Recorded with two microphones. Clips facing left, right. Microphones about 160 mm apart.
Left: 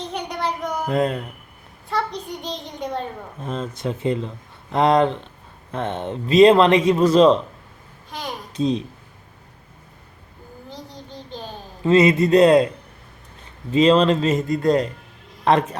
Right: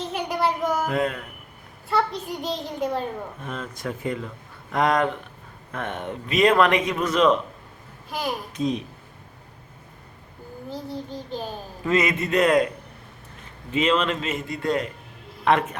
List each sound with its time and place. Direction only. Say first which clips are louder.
0.0 s a sound: right 2 dB; 5° right (ahead or behind)
0.9 s a man's voice: left 4 dB; 30° left (ahead or behind)
1.9 s a child's voice: right 1 dB; 5° right (ahead or behind)
3.4 s speech: left 8 dB; 30° left (ahead or behind)
8.1 s a child's voice: right 3 dB; 5° right (ahead or behind)
8.5 s speech: left 5 dB; 30° left (ahead or behind)
10.7 s child singing: right 6 dB; 5° right (ahead or behind)
11.8 s a man's voice: left 8 dB; 30° left (ahead or behind)